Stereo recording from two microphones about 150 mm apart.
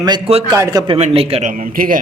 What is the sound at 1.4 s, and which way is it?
Speech, 65° right (ahead or behind).